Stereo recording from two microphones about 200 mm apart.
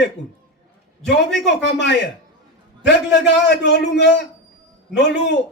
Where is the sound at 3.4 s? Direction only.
60° left (ahead or behind).